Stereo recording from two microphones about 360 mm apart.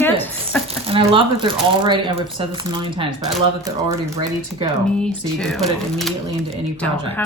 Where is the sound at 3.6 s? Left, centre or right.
Centre.